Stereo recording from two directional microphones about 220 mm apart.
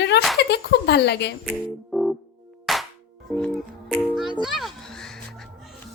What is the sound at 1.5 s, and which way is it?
Music, centre (ahead or behind).